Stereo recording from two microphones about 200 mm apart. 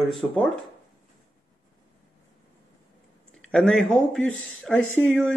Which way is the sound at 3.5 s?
5° left (ahead or behind).